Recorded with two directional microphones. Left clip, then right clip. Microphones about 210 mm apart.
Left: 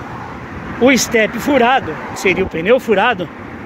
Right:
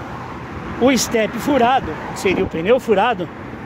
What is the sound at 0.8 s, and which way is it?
Speech, centre (ahead or behind).